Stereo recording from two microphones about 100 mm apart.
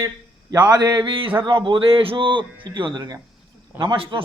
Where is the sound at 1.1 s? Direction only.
60° right (ahead or behind).